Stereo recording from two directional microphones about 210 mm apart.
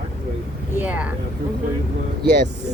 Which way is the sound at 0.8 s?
5° right (ahead or behind).